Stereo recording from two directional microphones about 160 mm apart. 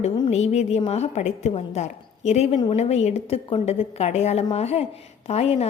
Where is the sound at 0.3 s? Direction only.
45° left (ahead or behind).